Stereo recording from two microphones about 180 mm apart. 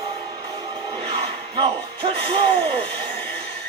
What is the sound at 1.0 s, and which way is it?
Speech, 30° right (ahead or behind).